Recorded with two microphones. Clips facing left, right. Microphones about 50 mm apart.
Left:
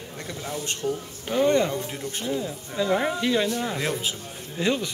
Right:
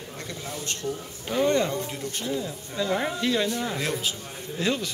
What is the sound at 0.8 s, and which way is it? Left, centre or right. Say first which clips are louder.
Speech: left 3 dB; centre.